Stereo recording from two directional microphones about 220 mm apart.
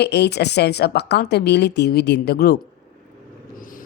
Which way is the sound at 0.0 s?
50° left (ahead or behind).